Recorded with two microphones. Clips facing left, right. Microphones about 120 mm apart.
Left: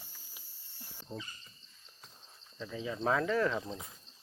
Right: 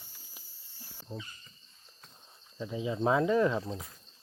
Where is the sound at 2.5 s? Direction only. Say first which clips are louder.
Right 5 dB; 15° right (ahead or behind).